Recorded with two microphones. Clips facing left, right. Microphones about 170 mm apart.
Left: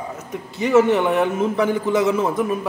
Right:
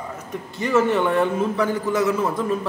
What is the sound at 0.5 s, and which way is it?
A man's voice, 15° left (ahead or behind).